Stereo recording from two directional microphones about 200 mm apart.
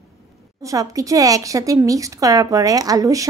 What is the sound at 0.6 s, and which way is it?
Speech, 15° right (ahead or behind).